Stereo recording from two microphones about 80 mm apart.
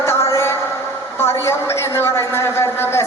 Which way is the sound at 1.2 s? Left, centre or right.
Left.